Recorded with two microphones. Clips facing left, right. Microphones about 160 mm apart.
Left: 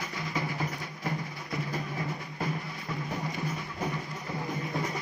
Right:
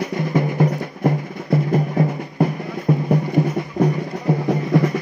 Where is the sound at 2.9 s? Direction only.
55° right (ahead or behind).